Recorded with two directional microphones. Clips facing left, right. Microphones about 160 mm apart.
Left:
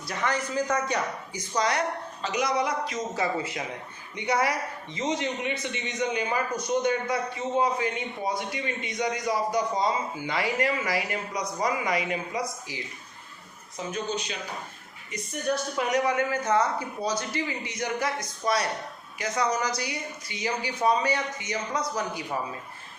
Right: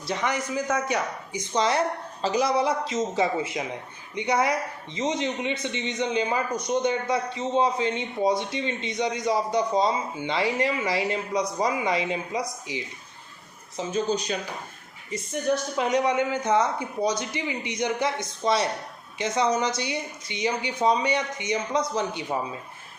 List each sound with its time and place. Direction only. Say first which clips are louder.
0.1 s a man's voice: right 2 dB; 20° right (ahead or behind)
13.7 s a man's voice: right 5 dB; 30° right (ahead or behind)